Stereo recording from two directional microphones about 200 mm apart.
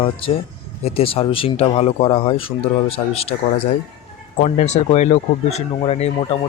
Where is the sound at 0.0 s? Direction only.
25° left (ahead or behind).